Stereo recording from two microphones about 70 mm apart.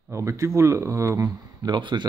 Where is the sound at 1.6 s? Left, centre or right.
Right.